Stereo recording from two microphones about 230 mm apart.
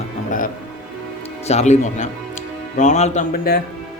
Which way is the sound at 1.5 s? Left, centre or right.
Left.